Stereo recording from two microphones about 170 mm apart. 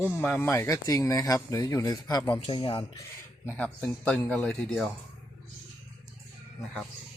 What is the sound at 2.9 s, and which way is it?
Speech, 15° left (ahead or behind).